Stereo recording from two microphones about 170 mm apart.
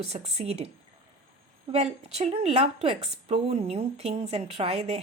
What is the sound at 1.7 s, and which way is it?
A woman's voice, 40° right (ahead or behind).